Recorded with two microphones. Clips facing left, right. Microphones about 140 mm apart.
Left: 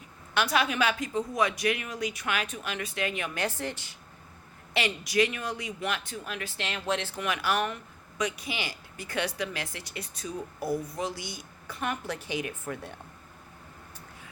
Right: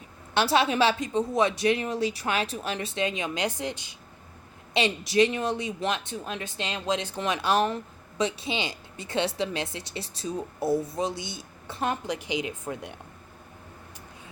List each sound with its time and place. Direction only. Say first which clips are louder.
0.3 s a woman's voice: right 4 dB; 30° right (ahead or behind)
7.2 s a woman's voice: right 7 dB; 25° right (ahead or behind)
12.0 s speech: right 3 dB; 15° right (ahead or behind)